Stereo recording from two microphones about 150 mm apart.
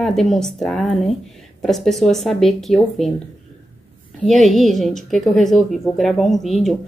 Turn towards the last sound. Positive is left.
turn(degrees=0)  # may be behind; listen again after turning